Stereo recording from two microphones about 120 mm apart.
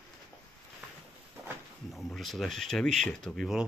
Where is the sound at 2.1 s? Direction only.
Centre (ahead or behind).